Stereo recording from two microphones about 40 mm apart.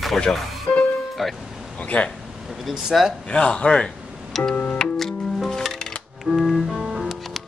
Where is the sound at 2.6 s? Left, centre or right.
Centre.